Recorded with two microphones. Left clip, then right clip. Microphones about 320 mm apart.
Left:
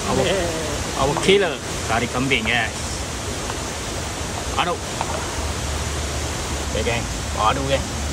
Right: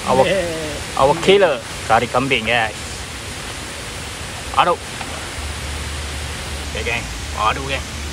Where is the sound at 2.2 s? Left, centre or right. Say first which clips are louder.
Right 2 dB; left.